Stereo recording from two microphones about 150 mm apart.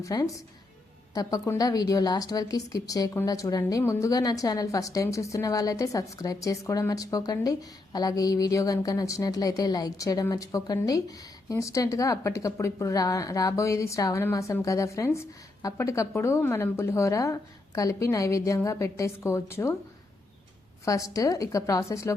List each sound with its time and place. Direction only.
0.0 s a woman's voice: 25° left (ahead or behind)
20.8 s a woman's voice: 20° left (ahead or behind)